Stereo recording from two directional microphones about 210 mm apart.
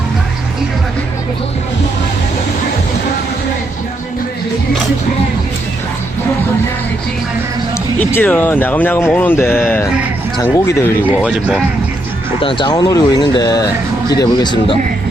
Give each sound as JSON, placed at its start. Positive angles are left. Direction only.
{"t": 7.9, "sound": "speech", "side_deg": 10}
{"t": 11.0, "sound": "speech", "side_deg": -5}
{"t": 12.4, "sound": "speech", "side_deg": 25}